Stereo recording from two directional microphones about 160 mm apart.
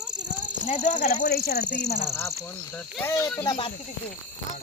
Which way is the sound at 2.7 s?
15° left (ahead or behind).